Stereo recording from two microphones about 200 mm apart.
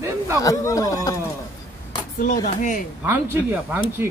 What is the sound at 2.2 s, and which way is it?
Speech, 40° left (ahead or behind).